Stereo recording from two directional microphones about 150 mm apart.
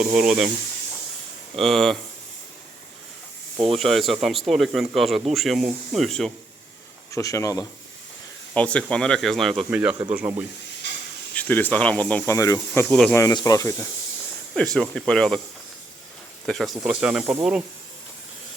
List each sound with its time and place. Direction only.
0.0 s speech: 5° right (ahead or behind)
1.5 s speech: centre (ahead or behind)
3.8 s speech: centre (ahead or behind)
7.1 s speech: 20° left (ahead or behind)
8.5 s speech: 10° left (ahead or behind)
9.6 s speech: 10° right (ahead or behind)
11.3 s speech: 10° left (ahead or behind)
12.9 s speech: 5° left (ahead or behind)
13.1 s speech: 20° left (ahead or behind)
14.5 s speech: 5° left (ahead or behind)
16.5 s speech: centre (ahead or behind)